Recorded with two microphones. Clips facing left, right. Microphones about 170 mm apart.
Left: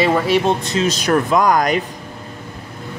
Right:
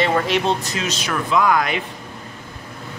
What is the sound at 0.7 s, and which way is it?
Speech, 35° left (ahead or behind).